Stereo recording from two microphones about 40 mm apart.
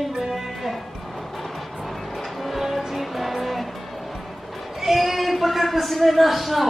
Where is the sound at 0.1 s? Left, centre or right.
Centre.